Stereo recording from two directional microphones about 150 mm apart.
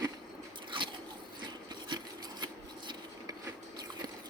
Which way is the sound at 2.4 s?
30° right (ahead or behind).